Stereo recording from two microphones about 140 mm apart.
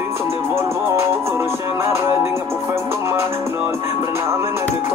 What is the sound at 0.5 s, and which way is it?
Music, 20° right (ahead or behind).